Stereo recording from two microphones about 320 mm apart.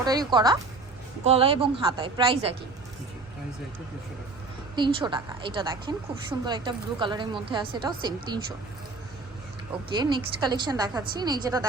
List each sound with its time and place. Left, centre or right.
0.0 s a woman's voice: centre
4.7 s a woman's voice: centre
10.0 s a woman's voice: centre